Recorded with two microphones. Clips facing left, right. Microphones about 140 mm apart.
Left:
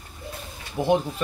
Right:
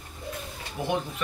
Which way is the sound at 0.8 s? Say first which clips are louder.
Left 8 dB; 25° left (ahead or behind).